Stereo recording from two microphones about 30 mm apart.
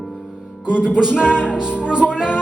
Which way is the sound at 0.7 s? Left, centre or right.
Right.